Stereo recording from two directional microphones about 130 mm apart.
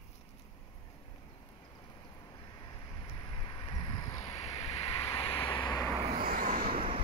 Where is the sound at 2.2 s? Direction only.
35° left (ahead or behind).